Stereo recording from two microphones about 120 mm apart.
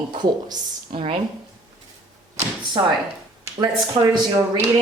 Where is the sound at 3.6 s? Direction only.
35° right (ahead or behind).